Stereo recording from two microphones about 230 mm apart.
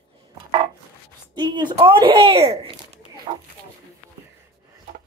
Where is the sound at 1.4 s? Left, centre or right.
Centre.